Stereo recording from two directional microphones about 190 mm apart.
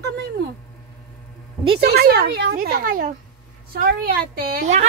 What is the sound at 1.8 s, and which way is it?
Speech, 55° right (ahead or behind).